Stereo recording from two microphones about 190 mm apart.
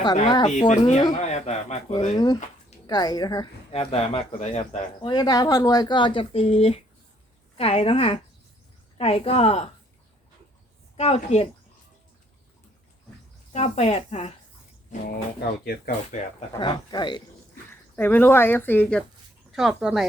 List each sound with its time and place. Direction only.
0.3 s speech: 25° left (ahead or behind)
0.7 s speech: 35° left (ahead or behind)
2.1 s speech: 20° left (ahead or behind)
3.7 s speech: 30° left (ahead or behind)
5.1 s speech: 20° left (ahead or behind)
10.9 s speech: 35° left (ahead or behind)
13.5 s speech: 35° left (ahead or behind)
15.0 s speech: 55° left (ahead or behind)
15.9 s speech: 30° left (ahead or behind)
17.7 s speech: 10° left (ahead or behind)